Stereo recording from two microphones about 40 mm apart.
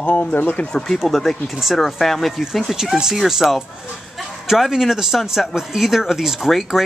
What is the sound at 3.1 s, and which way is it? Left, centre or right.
Speech, centre.